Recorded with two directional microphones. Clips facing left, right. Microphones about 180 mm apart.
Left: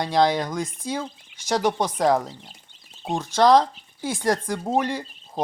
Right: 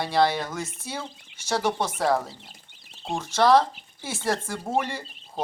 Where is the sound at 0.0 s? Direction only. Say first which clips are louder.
Left 2 dB; 15° left (ahead or behind).